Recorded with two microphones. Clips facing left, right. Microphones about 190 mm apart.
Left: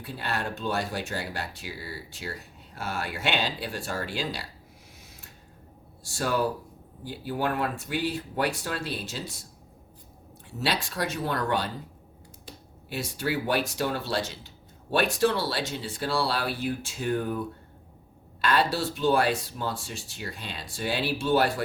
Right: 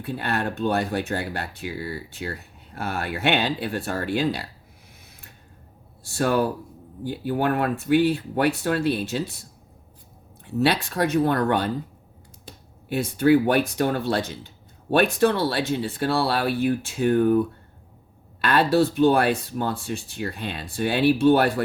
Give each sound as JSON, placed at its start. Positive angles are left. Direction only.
{"t": 0.0, "sound": "speech", "side_deg": -55}
{"t": 6.0, "sound": "speech", "side_deg": -60}
{"t": 10.4, "sound": "speech", "side_deg": -60}
{"t": 12.9, "sound": "speech", "side_deg": -55}
{"t": 18.4, "sound": "speech", "side_deg": -55}